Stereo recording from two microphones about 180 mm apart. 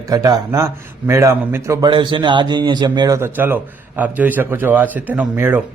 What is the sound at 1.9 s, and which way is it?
A man's voice, 25° right (ahead or behind).